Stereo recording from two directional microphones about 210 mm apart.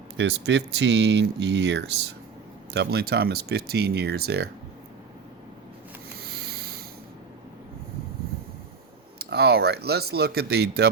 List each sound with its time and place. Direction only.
0.2 s speech: 55° right (ahead or behind)
6.1 s a sound: 50° right (ahead or behind)
9.1 s speech: 50° right (ahead or behind)